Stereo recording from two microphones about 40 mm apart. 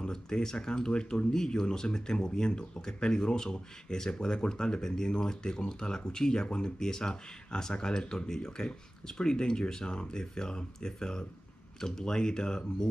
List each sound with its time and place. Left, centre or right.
0.0 s speech: centre